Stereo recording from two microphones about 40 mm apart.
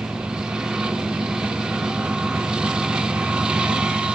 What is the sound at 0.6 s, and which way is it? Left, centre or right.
Vehicle, centre.